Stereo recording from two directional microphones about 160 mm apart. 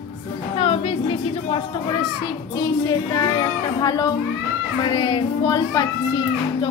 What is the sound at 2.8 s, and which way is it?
Speech, 25° left (ahead or behind).